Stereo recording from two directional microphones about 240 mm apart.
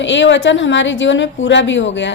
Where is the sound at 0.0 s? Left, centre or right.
Left.